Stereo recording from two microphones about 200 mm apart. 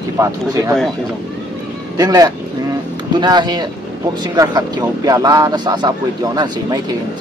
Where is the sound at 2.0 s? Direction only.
20° right (ahead or behind).